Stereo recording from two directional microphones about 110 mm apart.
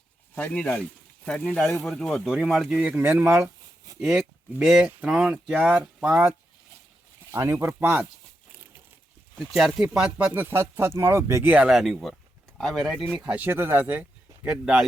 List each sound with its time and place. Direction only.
0.3 s speech: 10° left (ahead or behind)
2.3 s speech: 5° right (ahead or behind)
4.5 s speech: 5° right (ahead or behind)
7.3 s speech: 25° right (ahead or behind)
9.4 s speech: centre (ahead or behind); by 11.4 s 25° right (ahead or behind)
11.4 s speech: 10° right (ahead or behind)
13.1 s speech: 10° right (ahead or behind)